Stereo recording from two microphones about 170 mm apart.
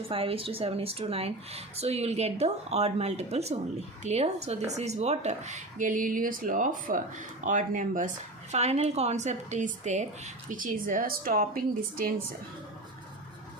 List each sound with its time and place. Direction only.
0.1 s speech: 35° right (ahead or behind); by 12.1 s 60° right (ahead or behind)